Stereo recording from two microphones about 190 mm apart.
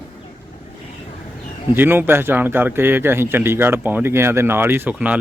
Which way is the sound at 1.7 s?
10° right (ahead or behind).